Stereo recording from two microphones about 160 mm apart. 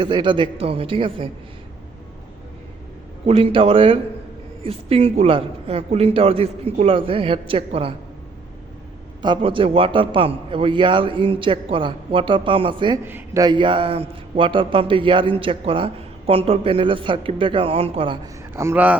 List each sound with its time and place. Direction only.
0.0 s a man's voice: 30° right (ahead or behind)
3.2 s a man's voice: 35° right (ahead or behind)
9.2 s a man's voice: 30° right (ahead or behind)
13.1 s speech: 15° right (ahead or behind)
13.4 s a man's voice: 30° right (ahead or behind)
18.5 s speech: 15° right (ahead or behind)